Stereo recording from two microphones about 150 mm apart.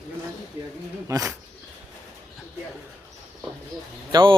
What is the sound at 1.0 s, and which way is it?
Speech, 20° right (ahead or behind).